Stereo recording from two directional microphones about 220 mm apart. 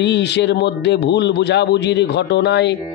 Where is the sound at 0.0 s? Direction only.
50° left (ahead or behind).